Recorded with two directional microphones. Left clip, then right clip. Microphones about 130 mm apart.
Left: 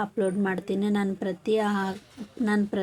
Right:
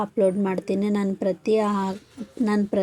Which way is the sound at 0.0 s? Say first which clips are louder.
Right 5 dB; 15° right (ahead or behind).